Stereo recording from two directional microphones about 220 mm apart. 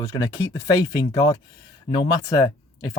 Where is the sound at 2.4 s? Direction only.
15° left (ahead or behind).